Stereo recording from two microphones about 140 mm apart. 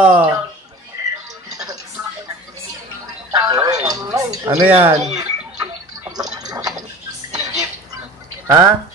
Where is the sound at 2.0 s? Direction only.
20° right (ahead or behind).